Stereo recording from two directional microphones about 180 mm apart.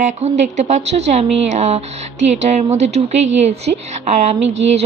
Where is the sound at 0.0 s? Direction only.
40° right (ahead or behind).